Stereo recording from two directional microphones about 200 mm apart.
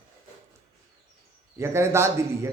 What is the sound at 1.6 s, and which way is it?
Speech, 15° right (ahead or behind).